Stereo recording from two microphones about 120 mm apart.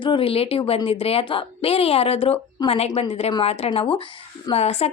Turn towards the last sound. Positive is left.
turn(degrees=60)  # may be behind; listen again after turning